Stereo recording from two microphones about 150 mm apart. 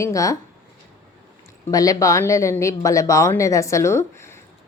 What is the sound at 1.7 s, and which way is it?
Speech, 25° left (ahead or behind).